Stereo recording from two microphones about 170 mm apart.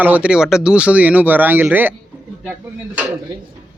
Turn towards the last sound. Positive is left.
turn(degrees=-10)  # may be behind; listen again after turning